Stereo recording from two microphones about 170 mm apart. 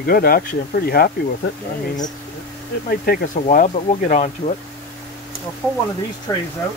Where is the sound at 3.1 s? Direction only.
60° left (ahead or behind).